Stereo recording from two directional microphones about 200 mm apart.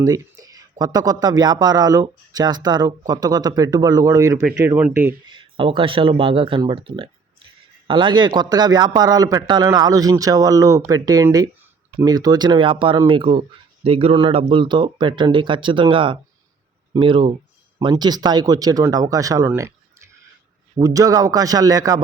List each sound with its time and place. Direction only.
0.0 s a sound: 20° right (ahead or behind)
0.8 s speech: 20° right (ahead or behind)
4.4 s a man's voice: 5° right (ahead or behind)
5.3 s a man's voice: 25° right (ahead or behind)
20.7 s a man's voice: 15° right (ahead or behind)